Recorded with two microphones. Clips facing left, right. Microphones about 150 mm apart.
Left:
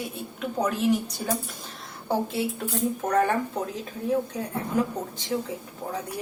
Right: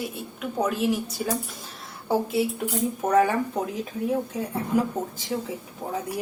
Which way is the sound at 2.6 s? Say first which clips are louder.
Right 1 dB; 10° right (ahead or behind).